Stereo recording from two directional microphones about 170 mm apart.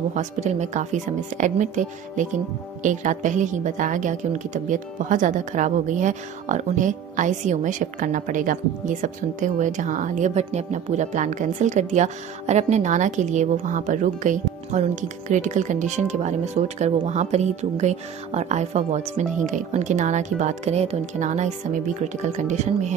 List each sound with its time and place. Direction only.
0.1 s a woman's voice: 45° right (ahead or behind)